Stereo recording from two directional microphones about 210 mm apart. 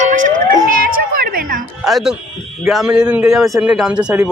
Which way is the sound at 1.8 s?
Centre (ahead or behind).